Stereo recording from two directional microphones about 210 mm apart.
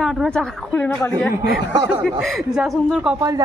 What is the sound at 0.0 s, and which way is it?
A woman's voice, centre (ahead or behind).